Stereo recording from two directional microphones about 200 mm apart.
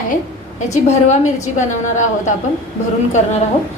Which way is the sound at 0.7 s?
35° left (ahead or behind).